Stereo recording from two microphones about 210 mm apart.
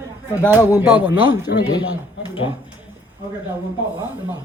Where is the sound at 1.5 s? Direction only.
50° left (ahead or behind).